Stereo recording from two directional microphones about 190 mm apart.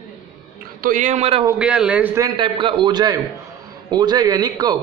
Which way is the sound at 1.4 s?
5° right (ahead or behind).